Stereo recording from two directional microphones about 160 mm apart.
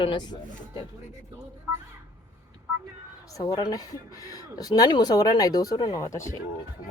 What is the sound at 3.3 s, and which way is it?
Speech, 25° left (ahead or behind).